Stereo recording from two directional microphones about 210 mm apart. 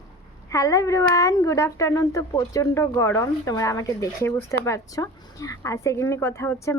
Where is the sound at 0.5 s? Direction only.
15° left (ahead or behind).